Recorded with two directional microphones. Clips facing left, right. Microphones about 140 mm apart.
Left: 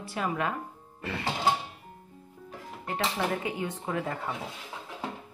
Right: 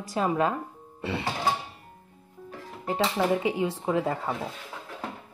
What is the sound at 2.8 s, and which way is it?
Speech, 30° right (ahead or behind).